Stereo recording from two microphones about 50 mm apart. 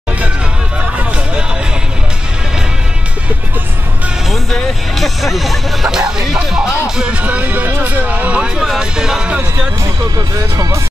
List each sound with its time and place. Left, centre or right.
4.3 s speech: centre
7.0 s speech: right
8.4 s speech: centre